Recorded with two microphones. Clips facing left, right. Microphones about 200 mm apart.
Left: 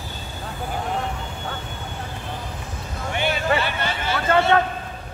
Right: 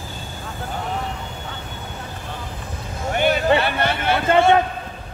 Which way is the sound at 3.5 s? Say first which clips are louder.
Right 4 dB; 60° right (ahead or behind).